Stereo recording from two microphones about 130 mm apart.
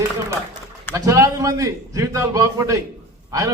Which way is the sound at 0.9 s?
25° right (ahead or behind).